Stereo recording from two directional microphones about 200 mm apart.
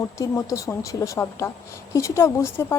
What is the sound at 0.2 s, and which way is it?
Speech, 15° left (ahead or behind).